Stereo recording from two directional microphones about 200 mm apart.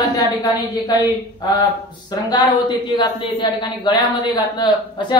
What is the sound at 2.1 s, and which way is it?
A woman's voice, 20° left (ahead or behind).